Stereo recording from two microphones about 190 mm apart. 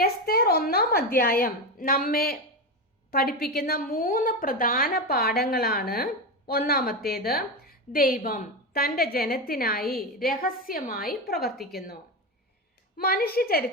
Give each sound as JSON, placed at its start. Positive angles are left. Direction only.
{"t": 0.0, "sound": "a woman's voice", "side_deg": 55}
{"t": 13.0, "sound": "a woman's voice", "side_deg": 50}